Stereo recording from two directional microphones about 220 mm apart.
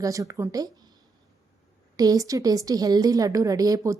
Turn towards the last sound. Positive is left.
turn(degrees=-15)  # may be behind; listen again after turning